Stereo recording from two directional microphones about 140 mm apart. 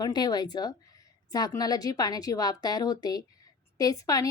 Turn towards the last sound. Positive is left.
turn(degrees=25)  # may be behind; listen again after turning